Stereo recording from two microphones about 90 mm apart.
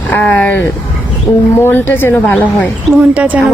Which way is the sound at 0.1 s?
20° left (ahead or behind).